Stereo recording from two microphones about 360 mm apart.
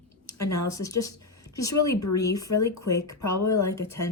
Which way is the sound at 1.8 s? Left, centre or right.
Centre.